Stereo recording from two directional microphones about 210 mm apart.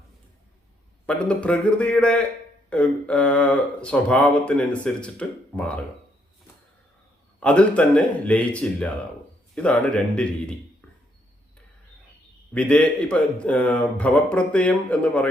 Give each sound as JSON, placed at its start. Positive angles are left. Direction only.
{"t": 1.0, "sound": "speech", "side_deg": 5}
{"t": 7.3, "sound": "speech", "side_deg": 5}
{"t": 12.5, "sound": "speech", "side_deg": 5}